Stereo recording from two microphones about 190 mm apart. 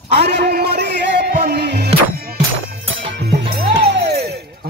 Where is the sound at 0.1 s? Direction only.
65° right (ahead or behind).